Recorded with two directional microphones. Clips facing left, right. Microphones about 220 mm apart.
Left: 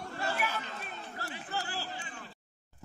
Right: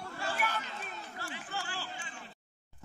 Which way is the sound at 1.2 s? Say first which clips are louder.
Left 3 dB; 40° left (ahead or behind).